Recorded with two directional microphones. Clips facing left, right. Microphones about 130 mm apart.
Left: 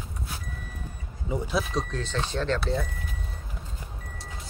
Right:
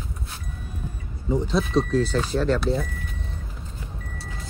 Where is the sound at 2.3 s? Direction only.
5° right (ahead or behind).